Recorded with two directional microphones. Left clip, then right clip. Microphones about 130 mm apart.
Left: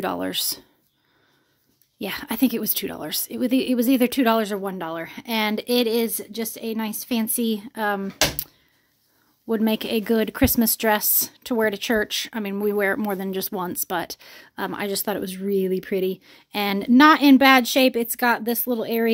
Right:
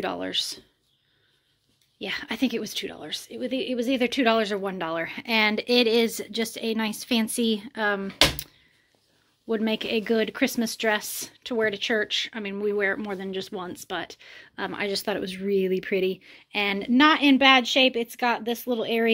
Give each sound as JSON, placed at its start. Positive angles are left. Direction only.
{"t": 0.0, "sound": "speech", "side_deg": 60}
{"t": 2.0, "sound": "speech", "side_deg": 60}
{"t": 4.6, "sound": "speech", "side_deg": 25}
{"t": 9.5, "sound": "speech", "side_deg": 45}